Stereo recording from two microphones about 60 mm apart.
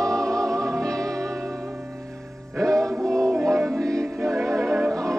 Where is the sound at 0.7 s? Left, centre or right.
Centre.